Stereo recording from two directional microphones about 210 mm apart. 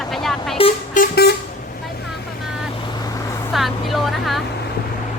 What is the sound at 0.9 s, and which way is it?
Vehicle, 50° left (ahead or behind).